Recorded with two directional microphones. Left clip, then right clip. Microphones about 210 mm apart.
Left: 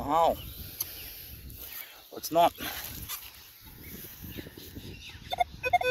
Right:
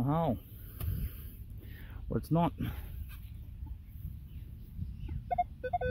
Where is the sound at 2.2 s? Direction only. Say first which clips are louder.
Left 10 dB; 15° right (ahead or behind).